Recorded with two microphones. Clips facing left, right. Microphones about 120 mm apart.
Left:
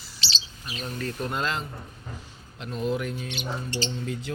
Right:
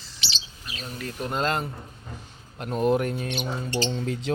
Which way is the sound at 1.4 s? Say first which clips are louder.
Right 4 dB; 50° right (ahead or behind).